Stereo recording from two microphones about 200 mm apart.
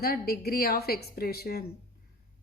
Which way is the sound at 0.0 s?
50° left (ahead or behind).